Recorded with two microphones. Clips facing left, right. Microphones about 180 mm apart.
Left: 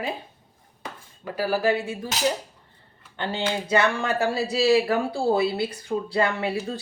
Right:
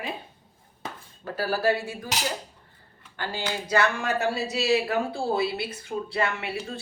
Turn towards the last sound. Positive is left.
turn(degrees=35)  # may be behind; listen again after turning